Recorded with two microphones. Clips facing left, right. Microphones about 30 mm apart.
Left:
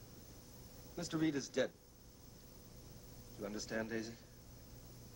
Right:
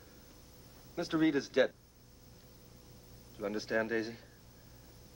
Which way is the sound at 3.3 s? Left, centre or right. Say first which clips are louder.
Right 8 dB; right.